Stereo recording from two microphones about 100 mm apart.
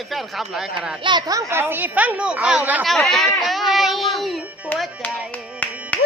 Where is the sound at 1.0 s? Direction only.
50° right (ahead or behind).